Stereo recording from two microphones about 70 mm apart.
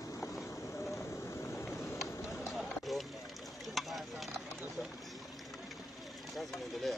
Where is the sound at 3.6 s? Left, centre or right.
Centre.